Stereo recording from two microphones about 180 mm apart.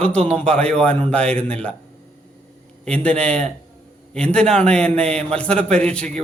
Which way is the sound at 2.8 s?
5° left (ahead or behind).